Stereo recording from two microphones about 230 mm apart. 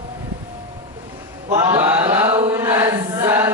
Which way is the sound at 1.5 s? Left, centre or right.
Centre.